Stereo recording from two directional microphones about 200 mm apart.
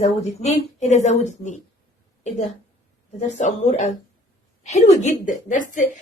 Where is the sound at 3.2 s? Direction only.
35° left (ahead or behind).